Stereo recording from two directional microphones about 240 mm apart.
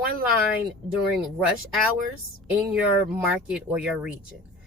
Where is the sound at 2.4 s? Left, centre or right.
Centre.